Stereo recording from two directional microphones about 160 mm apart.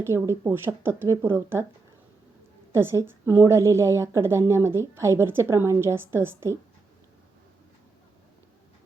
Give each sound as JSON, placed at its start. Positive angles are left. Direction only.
{"t": 0.0, "sound": "a woman's voice", "side_deg": -15}
{"t": 2.7, "sound": "a woman's voice", "side_deg": -15}